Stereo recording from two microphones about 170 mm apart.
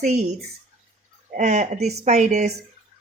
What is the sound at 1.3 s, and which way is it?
Speech, 45° right (ahead or behind).